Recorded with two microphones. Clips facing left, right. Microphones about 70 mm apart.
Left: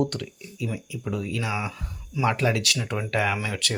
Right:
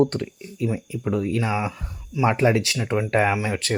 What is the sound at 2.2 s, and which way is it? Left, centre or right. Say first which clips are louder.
Speech: right 4 dB; right.